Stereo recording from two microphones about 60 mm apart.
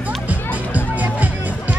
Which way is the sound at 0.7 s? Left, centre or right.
Right.